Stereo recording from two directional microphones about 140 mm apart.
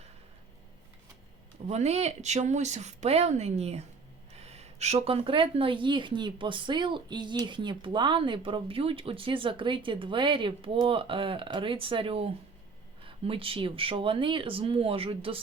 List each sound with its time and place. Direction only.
1.6 s speech: 50° right (ahead or behind)
4.4 s a sound: 50° right (ahead or behind)
4.9 s speech: 40° right (ahead or behind)